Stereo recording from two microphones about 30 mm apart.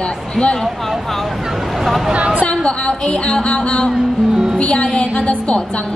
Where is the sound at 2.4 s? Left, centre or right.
Left.